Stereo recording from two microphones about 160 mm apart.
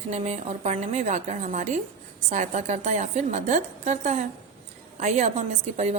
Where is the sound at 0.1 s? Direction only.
45° right (ahead or behind).